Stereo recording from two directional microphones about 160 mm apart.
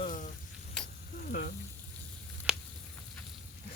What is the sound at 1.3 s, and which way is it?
Frying, 65° left (ahead or behind).